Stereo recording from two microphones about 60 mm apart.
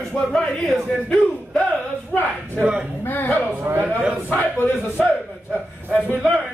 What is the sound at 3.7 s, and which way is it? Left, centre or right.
Speech, right.